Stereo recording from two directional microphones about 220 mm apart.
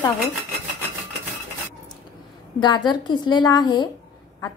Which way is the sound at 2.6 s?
20° left (ahead or behind).